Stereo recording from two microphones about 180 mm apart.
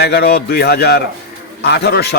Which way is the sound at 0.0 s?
65° left (ahead or behind).